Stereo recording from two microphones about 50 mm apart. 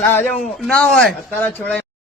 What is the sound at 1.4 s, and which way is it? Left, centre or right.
Speech, left.